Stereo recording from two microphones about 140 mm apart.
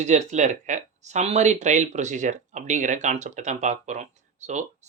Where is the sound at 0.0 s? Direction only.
55° right (ahead or behind).